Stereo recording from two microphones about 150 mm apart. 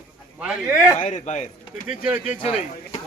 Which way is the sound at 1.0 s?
55° left (ahead or behind).